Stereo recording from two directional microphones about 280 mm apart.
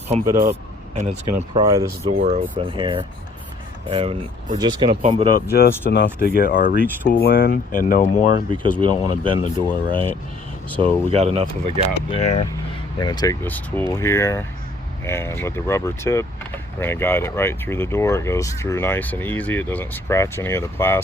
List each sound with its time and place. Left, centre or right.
0.1 s speech: right
1.6 s speech: centre
2.1 s speech: right
5.5 s speech: left
8.4 s speech: centre
12.1 s speech: left